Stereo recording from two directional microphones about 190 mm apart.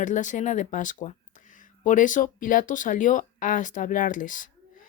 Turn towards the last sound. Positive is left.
turn(degrees=45)  # may be behind; listen again after turning